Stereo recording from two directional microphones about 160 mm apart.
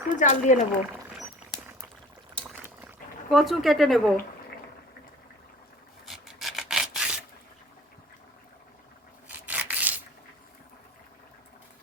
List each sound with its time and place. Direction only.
0.2 s speech: 50° left (ahead or behind)
3.2 s speech: centre (ahead or behind)
6.1 s rub: centre (ahead or behind)
9.5 s a sound: 10° right (ahead or behind)